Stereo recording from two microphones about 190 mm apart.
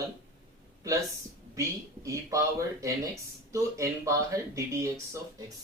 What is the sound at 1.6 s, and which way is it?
Speech, 15° right (ahead or behind).